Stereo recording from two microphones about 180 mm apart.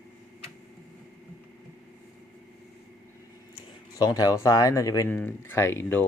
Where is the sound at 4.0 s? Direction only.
20° left (ahead or behind).